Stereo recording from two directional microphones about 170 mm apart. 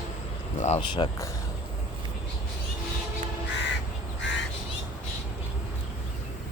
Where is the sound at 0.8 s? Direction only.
30° left (ahead or behind).